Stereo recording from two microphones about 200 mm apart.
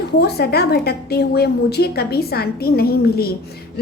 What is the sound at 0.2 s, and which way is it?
A woman's voice, 55° left (ahead or behind).